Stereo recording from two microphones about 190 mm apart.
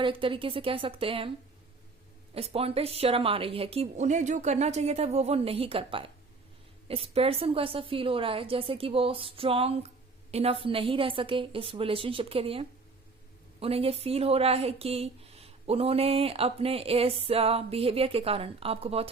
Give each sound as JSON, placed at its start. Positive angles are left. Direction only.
{"t": 0.0, "sound": "a woman's voice", "side_deg": -25}
{"t": 2.3, "sound": "a woman's voice", "side_deg": -30}